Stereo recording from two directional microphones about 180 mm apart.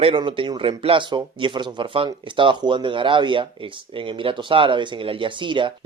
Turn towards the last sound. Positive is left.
turn(degrees=-25)  # may be behind; listen again after turning